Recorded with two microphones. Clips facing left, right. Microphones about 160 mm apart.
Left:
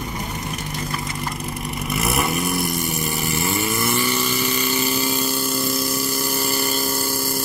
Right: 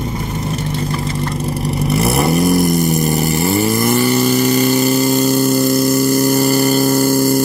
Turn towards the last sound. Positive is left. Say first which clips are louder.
# right 13 dB
turn(degrees=-45)  # may be behind; listen again after turning